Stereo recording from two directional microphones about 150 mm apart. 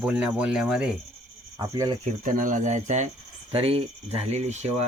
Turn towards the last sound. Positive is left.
turn(degrees=-50)  # may be behind; listen again after turning